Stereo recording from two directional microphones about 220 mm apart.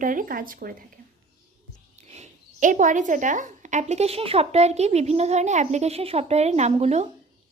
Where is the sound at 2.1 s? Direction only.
35° right (ahead or behind).